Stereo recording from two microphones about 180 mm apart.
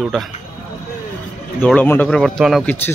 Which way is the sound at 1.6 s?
10° left (ahead or behind).